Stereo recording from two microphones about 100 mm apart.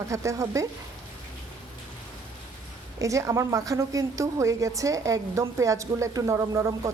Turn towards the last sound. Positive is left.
turn(degrees=-30)  # may be behind; listen again after turning